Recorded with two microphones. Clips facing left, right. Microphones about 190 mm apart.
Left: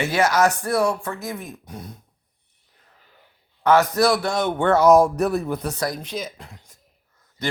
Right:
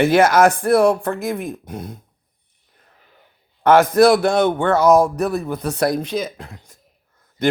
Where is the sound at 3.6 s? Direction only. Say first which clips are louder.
Right 5 dB; 50° right (ahead or behind).